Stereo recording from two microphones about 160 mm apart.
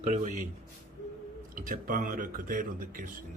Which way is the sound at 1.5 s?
60° right (ahead or behind).